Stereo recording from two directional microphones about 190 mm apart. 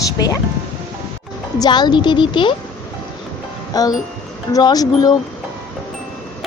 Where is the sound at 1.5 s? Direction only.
20° left (ahead or behind).